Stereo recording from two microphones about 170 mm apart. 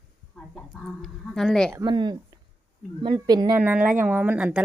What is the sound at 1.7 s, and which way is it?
A woman's voice, 25° right (ahead or behind).